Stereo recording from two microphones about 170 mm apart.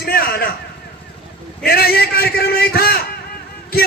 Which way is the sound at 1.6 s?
65° left (ahead or behind).